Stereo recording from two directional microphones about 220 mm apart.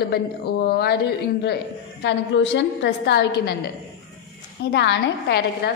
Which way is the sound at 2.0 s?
55° left (ahead or behind).